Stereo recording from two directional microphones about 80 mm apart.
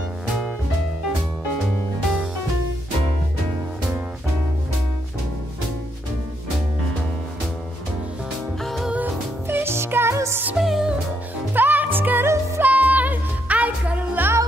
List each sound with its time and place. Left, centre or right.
8.6 s music: centre
8.9 s music: right
10.6 s music: centre
11.5 s music: right
12.6 s music: centre